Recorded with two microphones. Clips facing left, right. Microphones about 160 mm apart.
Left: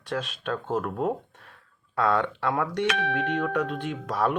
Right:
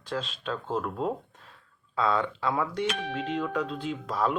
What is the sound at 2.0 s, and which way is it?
Speech, 65° left (ahead or behind).